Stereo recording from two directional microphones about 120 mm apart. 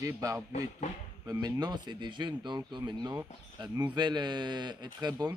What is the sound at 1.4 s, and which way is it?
Speech, 35° right (ahead or behind).